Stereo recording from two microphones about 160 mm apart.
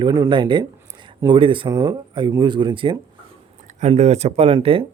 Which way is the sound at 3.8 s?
45° right (ahead or behind).